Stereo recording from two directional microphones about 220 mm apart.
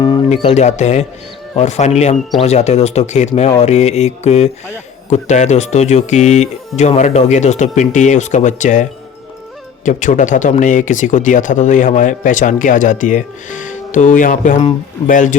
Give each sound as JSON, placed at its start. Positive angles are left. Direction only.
{"t": 0.0, "sound": "speech", "side_deg": 20}